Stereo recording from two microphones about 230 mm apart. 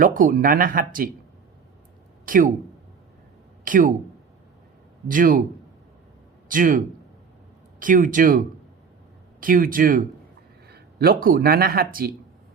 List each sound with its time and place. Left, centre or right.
0.0 s speech: right
2.2 s speech: right
3.6 s speech: right
5.0 s speech: right
6.5 s speech: right
9.4 s speech: right